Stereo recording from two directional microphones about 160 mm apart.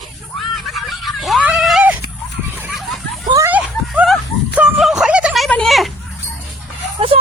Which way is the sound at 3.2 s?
20° right (ahead or behind).